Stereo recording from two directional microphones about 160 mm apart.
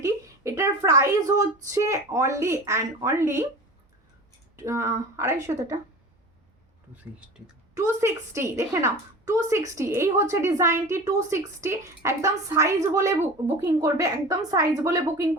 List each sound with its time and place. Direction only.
0.0 s a woman's voice: 20° right (ahead or behind)
4.5 s a woman's voice: 20° right (ahead or behind)
6.9 s speech: 10° right (ahead or behind)
8.0 s a woman's voice: 20° right (ahead or behind)